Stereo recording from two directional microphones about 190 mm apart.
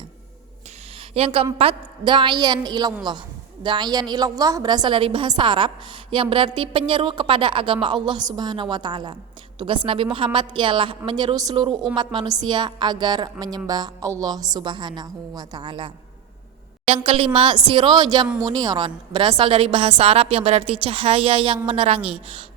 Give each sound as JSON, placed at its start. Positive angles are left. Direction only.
{"t": 1.1, "sound": "a woman's voice", "side_deg": -30}
{"t": 11.7, "sound": "a woman's voice", "side_deg": 0}
{"t": 11.9, "sound": "a woman's voice", "side_deg": -20}